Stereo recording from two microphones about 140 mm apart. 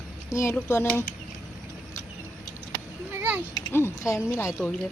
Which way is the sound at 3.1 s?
15° right (ahead or behind).